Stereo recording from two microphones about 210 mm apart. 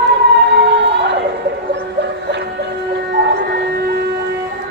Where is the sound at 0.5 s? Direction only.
55° right (ahead or behind).